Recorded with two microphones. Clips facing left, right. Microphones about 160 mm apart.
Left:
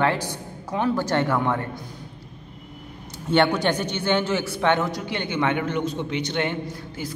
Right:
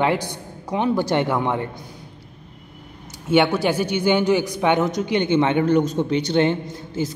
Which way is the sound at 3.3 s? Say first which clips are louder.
Right 2 dB; 5° right (ahead or behind).